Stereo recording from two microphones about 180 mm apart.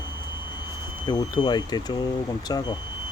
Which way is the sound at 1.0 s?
25° left (ahead or behind).